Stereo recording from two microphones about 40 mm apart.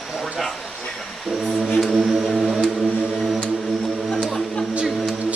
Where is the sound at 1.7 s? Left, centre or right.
Centre.